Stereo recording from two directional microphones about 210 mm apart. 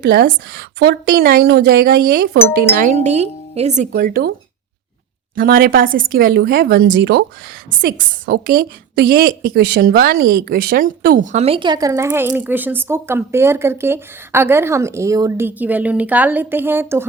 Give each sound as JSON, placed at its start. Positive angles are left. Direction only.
{"t": 0.0, "sound": "a woman's voice", "side_deg": -55}
{"t": 2.7, "sound": "speech", "side_deg": -35}
{"t": 5.3, "sound": "a woman's voice", "side_deg": -45}